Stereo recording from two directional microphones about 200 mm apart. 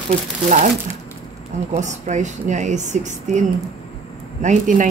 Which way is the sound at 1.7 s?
35° right (ahead or behind).